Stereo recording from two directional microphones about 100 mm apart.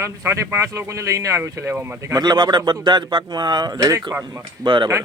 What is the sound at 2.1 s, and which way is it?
Speech, 45° right (ahead or behind).